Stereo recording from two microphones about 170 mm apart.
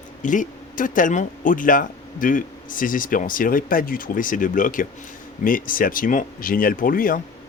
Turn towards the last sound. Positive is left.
turn(degrees=55)  # may be behind; listen again after turning